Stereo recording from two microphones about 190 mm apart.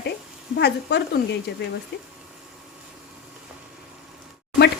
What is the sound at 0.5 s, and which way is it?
Speech, 60° left (ahead or behind).